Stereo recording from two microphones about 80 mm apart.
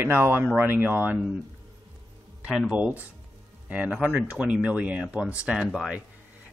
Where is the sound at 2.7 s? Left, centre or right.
Centre.